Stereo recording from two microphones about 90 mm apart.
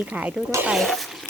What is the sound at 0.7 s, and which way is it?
Speech, centre (ahead or behind).